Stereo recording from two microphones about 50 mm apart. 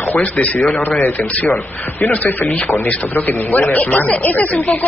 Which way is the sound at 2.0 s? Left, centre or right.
Left.